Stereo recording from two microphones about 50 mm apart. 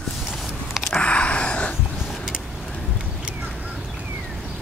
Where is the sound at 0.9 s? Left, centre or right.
Left.